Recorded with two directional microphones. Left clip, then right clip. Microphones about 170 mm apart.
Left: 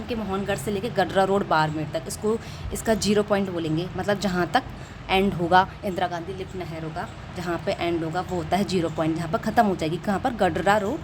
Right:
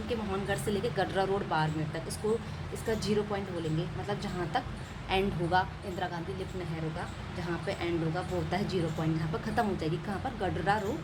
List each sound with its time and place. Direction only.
0.1 s speech: 30° left (ahead or behind)
2.8 s a woman's voice: 50° left (ahead or behind)
5.0 s speech: 35° left (ahead or behind)
7.4 s speech: 40° left (ahead or behind)